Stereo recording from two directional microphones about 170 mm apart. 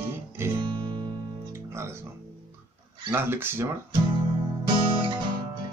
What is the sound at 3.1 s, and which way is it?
Speech, 15° right (ahead or behind).